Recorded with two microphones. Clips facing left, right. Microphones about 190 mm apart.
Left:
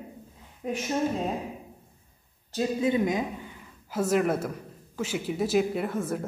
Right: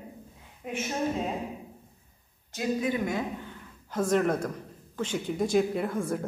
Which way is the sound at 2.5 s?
25° left (ahead or behind).